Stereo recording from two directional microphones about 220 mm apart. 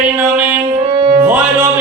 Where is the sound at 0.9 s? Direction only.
25° right (ahead or behind).